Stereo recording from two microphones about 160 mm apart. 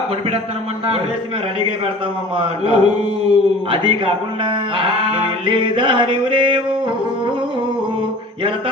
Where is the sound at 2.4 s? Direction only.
35° right (ahead or behind).